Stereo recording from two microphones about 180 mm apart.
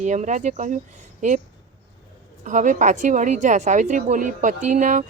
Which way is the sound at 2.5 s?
45° right (ahead or behind).